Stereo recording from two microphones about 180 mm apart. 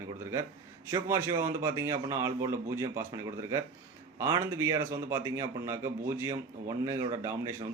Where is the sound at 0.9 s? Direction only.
15° right (ahead or behind).